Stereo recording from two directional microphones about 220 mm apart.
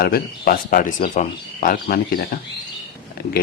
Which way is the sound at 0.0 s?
45° left (ahead or behind).